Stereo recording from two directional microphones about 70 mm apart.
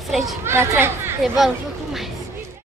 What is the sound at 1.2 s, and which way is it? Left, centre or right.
Speech, centre.